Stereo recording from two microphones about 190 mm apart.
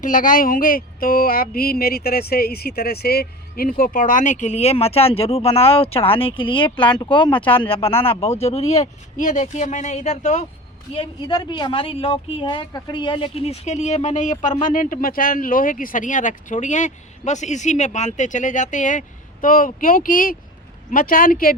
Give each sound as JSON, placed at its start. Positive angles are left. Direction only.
{"t": 0.0, "sound": "a woman's voice", "side_deg": 45}
{"t": 10.9, "sound": "a woman's voice", "side_deg": 25}